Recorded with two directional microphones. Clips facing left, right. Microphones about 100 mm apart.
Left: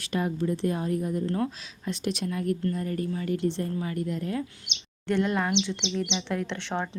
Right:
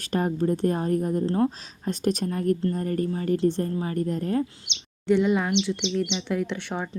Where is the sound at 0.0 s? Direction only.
45° right (ahead or behind).